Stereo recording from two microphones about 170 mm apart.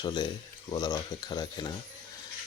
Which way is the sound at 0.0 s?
25° left (ahead or behind).